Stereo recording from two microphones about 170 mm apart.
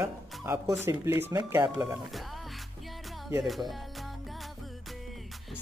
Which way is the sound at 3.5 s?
Centre (ahead or behind).